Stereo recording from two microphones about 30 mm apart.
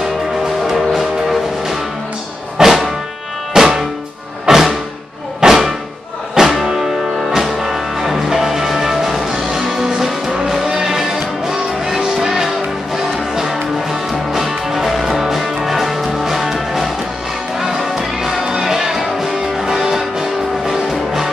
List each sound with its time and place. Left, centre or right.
0.7 s music: centre
15.3 s music: centre
17.6 s music: centre
18.4 s music: right